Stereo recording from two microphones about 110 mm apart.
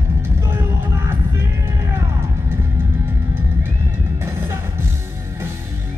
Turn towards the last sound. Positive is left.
turn(degrees=-25)  # may be behind; listen again after turning